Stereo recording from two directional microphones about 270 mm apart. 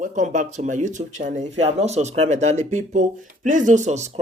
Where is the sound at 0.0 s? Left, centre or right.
Right.